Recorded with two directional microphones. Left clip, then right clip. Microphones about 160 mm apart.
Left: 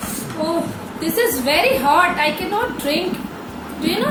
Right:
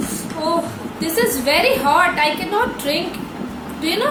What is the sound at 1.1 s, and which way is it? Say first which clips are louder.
A woman's voice: even; 20° right (ahead or behind).